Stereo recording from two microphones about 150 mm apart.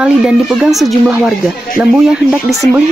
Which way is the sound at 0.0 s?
5° right (ahead or behind).